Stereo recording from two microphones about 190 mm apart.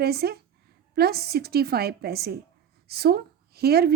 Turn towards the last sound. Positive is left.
turn(degrees=-55)  # may be behind; listen again after turning